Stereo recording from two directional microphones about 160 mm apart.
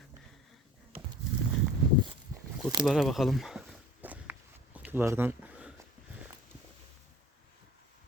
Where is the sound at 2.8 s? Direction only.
5° right (ahead or behind).